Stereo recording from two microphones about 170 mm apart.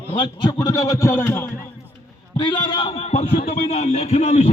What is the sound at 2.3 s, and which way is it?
A man's voice, 30° left (ahead or behind).